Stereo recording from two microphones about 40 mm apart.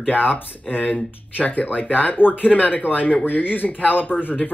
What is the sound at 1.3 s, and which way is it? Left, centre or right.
Speech, left.